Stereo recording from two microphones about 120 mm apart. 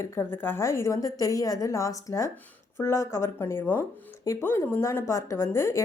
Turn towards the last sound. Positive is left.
turn(degrees=25)  # may be behind; listen again after turning